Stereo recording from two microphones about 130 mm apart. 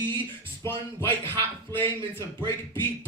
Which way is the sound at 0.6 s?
20° left (ahead or behind).